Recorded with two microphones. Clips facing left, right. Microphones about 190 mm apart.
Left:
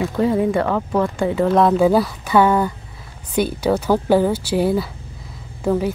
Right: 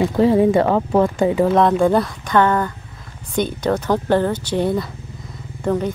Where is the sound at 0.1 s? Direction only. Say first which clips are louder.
Right 3 dB; 30° right (ahead or behind).